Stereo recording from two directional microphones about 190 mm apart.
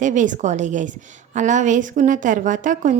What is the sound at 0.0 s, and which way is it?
A woman's voice, 40° right (ahead or behind).